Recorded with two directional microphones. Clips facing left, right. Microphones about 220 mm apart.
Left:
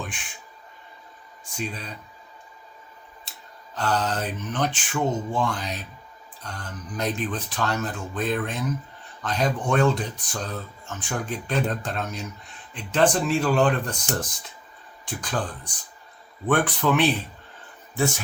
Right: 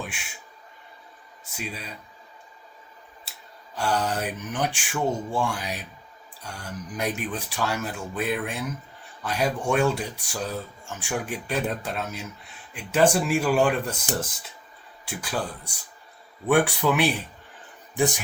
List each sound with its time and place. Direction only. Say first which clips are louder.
0.0 s a sound: even; 10° right (ahead or behind)
1.5 s speech: left 3 dB; 10° right (ahead or behind)
3.8 s speech: even; 10° right (ahead or behind)
15.0 s speech: left 1 dB; 10° right (ahead or behind)